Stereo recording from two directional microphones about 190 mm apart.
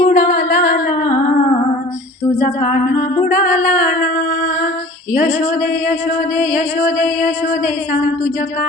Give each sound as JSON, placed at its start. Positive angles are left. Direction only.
{"t": 0.0, "sound": "music", "side_deg": 55}
{"t": 2.4, "sound": "music", "side_deg": 40}
{"t": 5.1, "sound": "female singing", "side_deg": 40}
{"t": 5.9, "sound": "music", "side_deg": 40}